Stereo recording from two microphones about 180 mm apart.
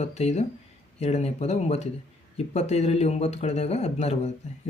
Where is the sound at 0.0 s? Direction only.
35° left (ahead or behind).